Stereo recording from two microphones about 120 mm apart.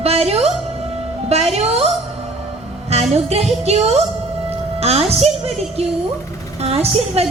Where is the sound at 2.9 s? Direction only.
60° right (ahead or behind).